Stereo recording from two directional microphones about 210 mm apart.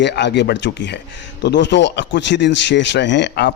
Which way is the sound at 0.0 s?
55° left (ahead or behind).